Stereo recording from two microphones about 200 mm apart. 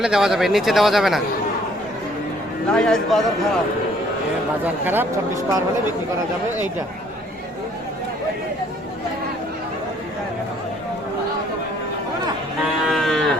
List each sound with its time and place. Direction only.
0.0 s speech: centre (ahead or behind)
2.7 s speech: 5° left (ahead or behind)
4.6 s speech: 10° right (ahead or behind)
12.8 s livestock: centre (ahead or behind)